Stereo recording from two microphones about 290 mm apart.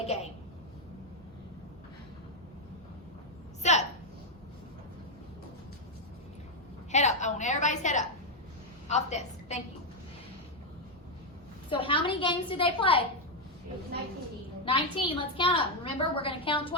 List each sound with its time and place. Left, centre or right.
3.6 s a sound: left
6.9 s a woman's voice: left
11.7 s a woman's voice: centre
14.6 s a woman's voice: centre